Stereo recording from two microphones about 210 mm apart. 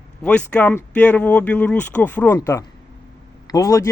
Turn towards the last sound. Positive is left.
turn(degrees=15)  # may be behind; listen again after turning